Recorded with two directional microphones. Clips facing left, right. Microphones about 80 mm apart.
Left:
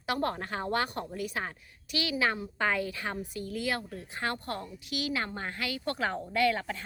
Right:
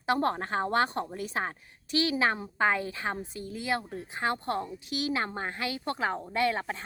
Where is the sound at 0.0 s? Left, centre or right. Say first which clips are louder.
Right 4 dB; right.